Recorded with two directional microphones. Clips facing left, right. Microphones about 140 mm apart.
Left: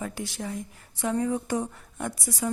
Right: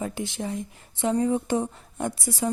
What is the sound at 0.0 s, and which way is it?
A woman's voice, 25° right (ahead or behind).